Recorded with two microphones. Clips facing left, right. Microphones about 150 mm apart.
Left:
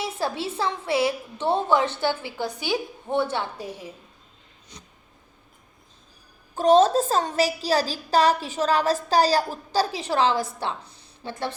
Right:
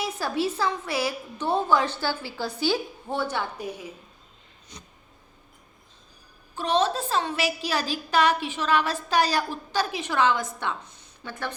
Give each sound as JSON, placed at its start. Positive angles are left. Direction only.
{"t": 0.0, "sound": "a woman's voice", "side_deg": 25}
{"t": 6.6, "sound": "a woman's voice", "side_deg": 45}